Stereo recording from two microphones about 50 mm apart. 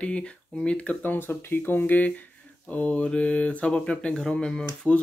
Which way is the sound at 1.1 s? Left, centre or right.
Left.